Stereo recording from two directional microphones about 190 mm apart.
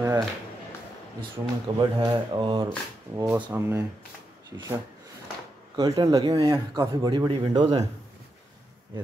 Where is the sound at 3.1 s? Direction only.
10° right (ahead or behind).